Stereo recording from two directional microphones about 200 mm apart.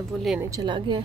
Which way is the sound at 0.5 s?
20° right (ahead or behind).